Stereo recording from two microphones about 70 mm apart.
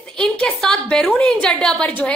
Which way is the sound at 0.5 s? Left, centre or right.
Centre.